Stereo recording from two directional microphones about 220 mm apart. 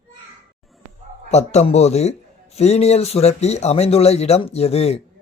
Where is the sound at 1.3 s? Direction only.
30° left (ahead or behind).